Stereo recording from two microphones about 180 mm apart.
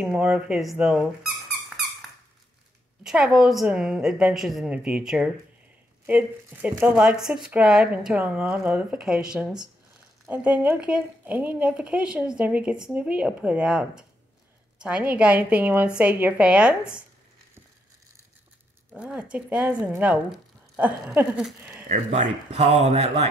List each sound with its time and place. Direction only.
0.0 s speech: 5° right (ahead or behind)
3.0 s speech: 5° right (ahead or behind)
18.9 s speech: 5° right (ahead or behind)
21.8 s speech: 40° right (ahead or behind)